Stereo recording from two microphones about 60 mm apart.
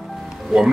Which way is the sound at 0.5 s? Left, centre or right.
Centre.